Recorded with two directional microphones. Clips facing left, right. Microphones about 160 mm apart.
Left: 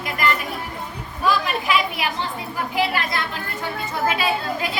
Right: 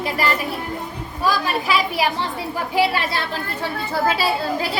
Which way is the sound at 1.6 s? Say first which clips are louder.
Right 2 dB; 35° right (ahead or behind).